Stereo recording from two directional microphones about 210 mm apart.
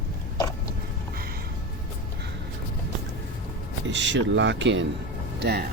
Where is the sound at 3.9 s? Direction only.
60° right (ahead or behind).